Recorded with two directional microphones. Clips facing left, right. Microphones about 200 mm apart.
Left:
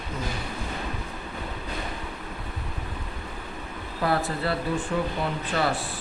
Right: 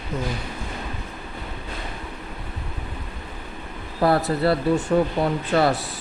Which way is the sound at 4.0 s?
40° right (ahead or behind).